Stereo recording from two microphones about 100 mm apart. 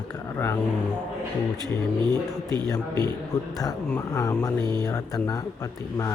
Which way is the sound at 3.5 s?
40° left (ahead or behind).